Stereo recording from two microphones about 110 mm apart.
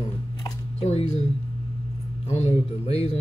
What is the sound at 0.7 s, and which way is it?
Speech, 80° left.